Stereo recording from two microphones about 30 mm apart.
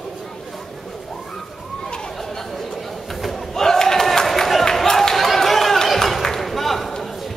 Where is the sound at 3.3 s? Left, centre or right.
Centre.